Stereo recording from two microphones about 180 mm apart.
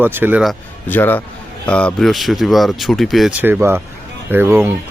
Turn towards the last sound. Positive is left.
turn(degrees=-15)  # may be behind; listen again after turning